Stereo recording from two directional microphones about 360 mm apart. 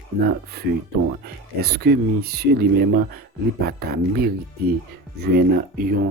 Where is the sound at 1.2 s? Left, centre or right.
Right.